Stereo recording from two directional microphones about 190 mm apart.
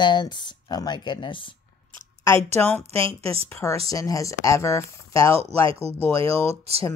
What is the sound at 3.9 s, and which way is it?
Speech, 15° left (ahead or behind).